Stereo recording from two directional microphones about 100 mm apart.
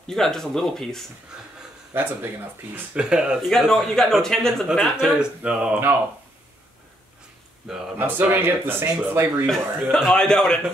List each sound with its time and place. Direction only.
0.0 s speech: 5° left (ahead or behind)
1.9 s speech: 20° right (ahead or behind)
3.4 s speech: centre (ahead or behind)
7.7 s speech: 5° right (ahead or behind)
8.0 s speech: 20° right (ahead or behind)
9.8 s speech: 5° left (ahead or behind)